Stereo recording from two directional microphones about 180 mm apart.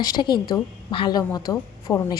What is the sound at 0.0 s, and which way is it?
A woman's voice, 20° left (ahead or behind).